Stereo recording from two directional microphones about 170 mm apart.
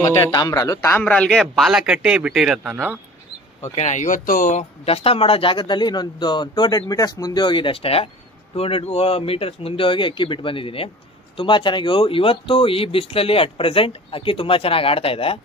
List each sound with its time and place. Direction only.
0.3 s a man's voice: 20° left (ahead or behind); by 3.0 s 10° right (ahead or behind)
3.7 s speech: 45° left (ahead or behind)
4.8 s a man's voice: 35° left (ahead or behind)